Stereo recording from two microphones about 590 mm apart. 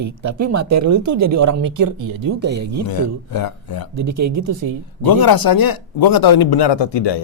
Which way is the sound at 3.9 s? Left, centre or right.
Right.